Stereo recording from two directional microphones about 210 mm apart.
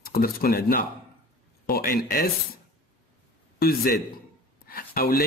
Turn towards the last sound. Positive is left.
turn(degrees=45)  # may be behind; listen again after turning